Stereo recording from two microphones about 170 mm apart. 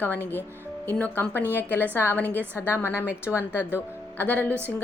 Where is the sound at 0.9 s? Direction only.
10° left (ahead or behind).